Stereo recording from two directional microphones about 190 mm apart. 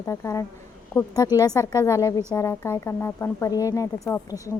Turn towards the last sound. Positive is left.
turn(degrees=15)  # may be behind; listen again after turning